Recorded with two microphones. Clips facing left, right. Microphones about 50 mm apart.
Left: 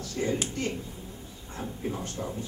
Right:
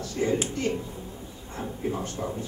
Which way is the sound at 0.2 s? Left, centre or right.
Centre.